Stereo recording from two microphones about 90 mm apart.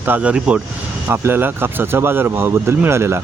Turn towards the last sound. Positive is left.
turn(degrees=-30)  # may be behind; listen again after turning